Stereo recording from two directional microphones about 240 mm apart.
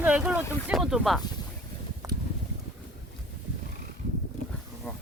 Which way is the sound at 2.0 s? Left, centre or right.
Centre.